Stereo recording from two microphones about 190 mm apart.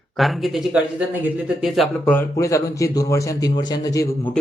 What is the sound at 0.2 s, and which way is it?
A man's voice, centre (ahead or behind).